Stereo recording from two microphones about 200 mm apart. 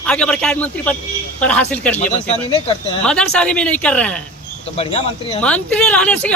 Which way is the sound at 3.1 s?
5° left (ahead or behind).